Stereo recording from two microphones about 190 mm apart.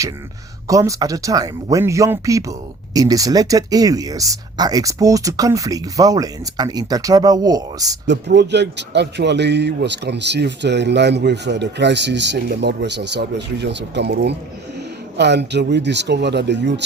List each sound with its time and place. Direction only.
0.7 s speech: 15° right (ahead or behind)
8.0 s a man's voice: 65° right (ahead or behind)